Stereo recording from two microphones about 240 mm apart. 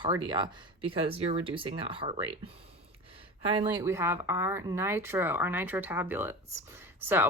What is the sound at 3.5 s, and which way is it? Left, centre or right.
Speech, centre.